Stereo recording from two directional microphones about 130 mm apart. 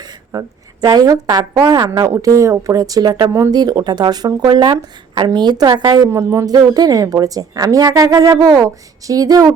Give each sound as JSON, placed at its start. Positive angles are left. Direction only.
{"t": 0.0, "sound": "speech", "side_deg": -30}